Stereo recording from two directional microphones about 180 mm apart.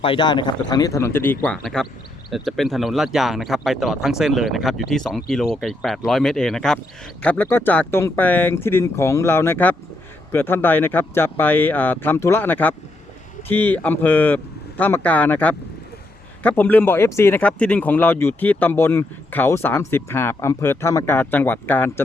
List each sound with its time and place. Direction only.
0.0 s speech: 25° left (ahead or behind); by 22.0 s 10° left (ahead or behind)